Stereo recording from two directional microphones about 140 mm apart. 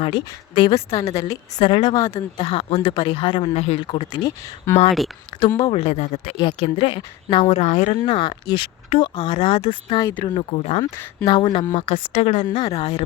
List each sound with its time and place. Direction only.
0.0 s speech: 35° left (ahead or behind)
1.2 s speech: 30° left (ahead or behind)
4.9 s speech: centre (ahead or behind)
5.7 s speech: 45° left (ahead or behind)
6.3 s speech: 35° left (ahead or behind)
9.3 s speech: 50° left (ahead or behind)
10.0 s speech: 15° left (ahead or behind)
10.2 s speech: 40° left (ahead or behind)
11.3 s speech: 30° left (ahead or behind)
12.1 s speech: 50° left (ahead or behind)